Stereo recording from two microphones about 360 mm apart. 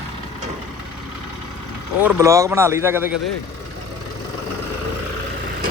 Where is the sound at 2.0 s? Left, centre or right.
Centre.